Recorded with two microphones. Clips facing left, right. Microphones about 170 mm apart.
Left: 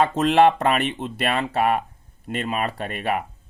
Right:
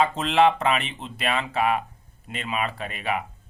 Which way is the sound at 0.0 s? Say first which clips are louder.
Left 3 dB; 50° left (ahead or behind).